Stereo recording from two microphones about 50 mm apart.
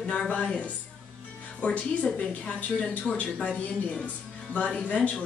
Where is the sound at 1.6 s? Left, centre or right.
Left.